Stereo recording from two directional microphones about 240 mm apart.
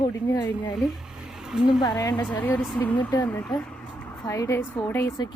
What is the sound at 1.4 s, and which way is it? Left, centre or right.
Speech, centre.